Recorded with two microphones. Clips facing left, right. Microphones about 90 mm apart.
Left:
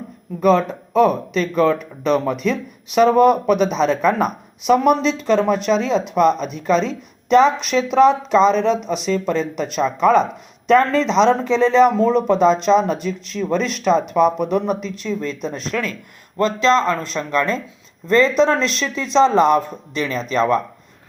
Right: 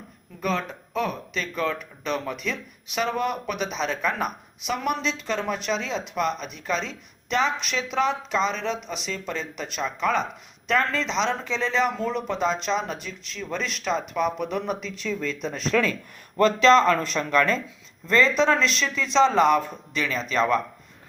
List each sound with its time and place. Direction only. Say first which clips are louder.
0.7 s speech: left 12 dB; 40° left (ahead or behind)
9.6 s speech: left 9 dB; 30° left (ahead or behind)
11.0 s speech: left 11 dB; 55° left (ahead or behind)
13.7 s a man's voice: left 10 dB; 25° left (ahead or behind)
18.3 s speech: left 5 dB; 40° left (ahead or behind)